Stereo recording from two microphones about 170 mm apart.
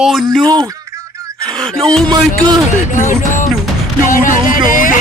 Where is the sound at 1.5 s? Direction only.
5° left (ahead or behind).